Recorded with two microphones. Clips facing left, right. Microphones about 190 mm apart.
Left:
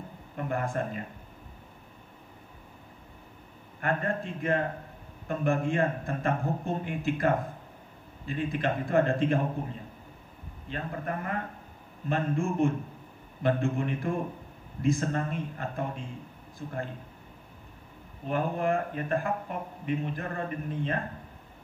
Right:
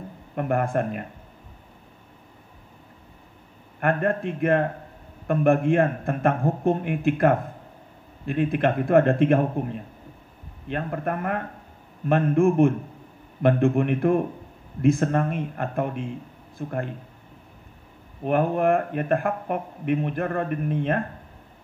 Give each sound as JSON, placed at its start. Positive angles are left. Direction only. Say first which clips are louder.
{"t": 0.4, "sound": "speech", "louder": "right 7 dB", "side_deg": -60}
{"t": 3.8, "sound": "speech", "louder": "right 7 dB", "side_deg": -60}
{"t": 18.2, "sound": "speech", "louder": "right 7 dB", "side_deg": -60}